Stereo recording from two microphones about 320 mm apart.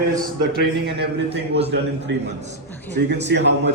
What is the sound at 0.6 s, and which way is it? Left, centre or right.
Speech, right.